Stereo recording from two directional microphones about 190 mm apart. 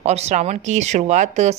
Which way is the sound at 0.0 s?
35° right (ahead or behind).